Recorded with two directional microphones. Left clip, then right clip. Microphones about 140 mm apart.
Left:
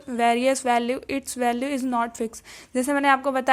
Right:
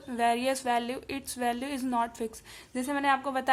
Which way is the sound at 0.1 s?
35° left (ahead or behind).